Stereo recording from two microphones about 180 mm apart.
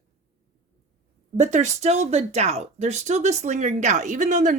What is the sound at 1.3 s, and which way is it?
Speech, 40° right (ahead or behind).